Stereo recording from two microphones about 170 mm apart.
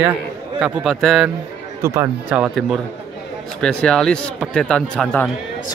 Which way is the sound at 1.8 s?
15° right (ahead or behind).